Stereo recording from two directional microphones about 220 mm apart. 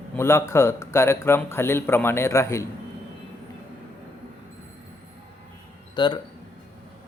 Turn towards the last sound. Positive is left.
turn(degrees=20)  # may be behind; listen again after turning